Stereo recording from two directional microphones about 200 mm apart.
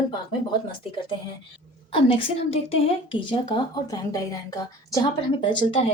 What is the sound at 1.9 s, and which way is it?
Speech, 25° left (ahead or behind).